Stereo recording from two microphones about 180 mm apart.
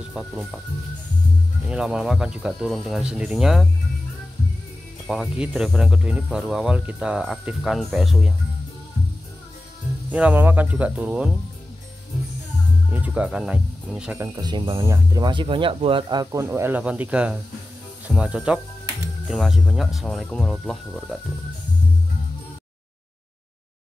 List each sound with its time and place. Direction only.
0.1 s speech: centre (ahead or behind)
1.7 s speech: 5° right (ahead or behind)
5.0 s speech: centre (ahead or behind)
10.1 s speech: 10° right (ahead or behind)
12.9 s speech: 5° right (ahead or behind)
14.2 s speech: 20° right (ahead or behind); by 21.2 s 5° left (ahead or behind)